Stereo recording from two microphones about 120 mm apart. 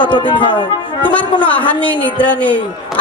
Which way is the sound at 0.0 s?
40° left (ahead or behind).